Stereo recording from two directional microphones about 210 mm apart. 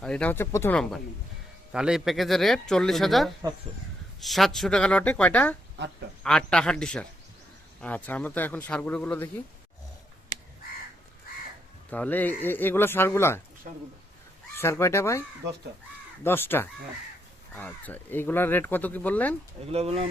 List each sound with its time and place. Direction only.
0.0 s speech: 5° left (ahead or behind)
11.9 s speech: 5° left (ahead or behind)
14.5 s speech: 10° left (ahead or behind)
16.2 s speech: 10° left (ahead or behind)
19.7 s speech: 30° right (ahead or behind)